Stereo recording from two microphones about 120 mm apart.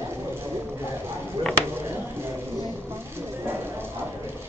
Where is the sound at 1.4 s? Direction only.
45° right (ahead or behind).